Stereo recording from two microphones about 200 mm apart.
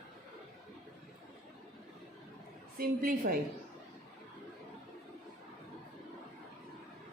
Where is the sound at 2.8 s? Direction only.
45° right (ahead or behind).